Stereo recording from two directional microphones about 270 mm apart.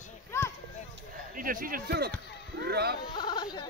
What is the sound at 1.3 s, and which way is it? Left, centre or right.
Speech, right.